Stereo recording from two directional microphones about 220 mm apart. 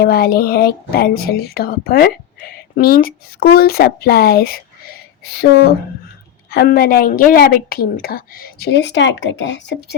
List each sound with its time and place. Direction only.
0.0 s a woman's voice: 45° left (ahead or behind)